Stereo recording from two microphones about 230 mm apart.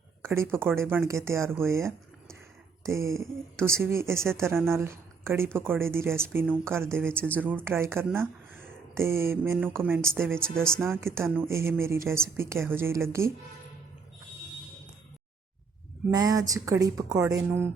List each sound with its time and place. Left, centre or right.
0.2 s speech: centre
7.2 s speech: centre
7.4 s speech: centre
16.0 s speech: centre